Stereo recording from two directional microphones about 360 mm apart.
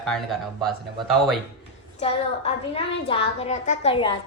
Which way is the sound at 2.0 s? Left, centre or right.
Centre.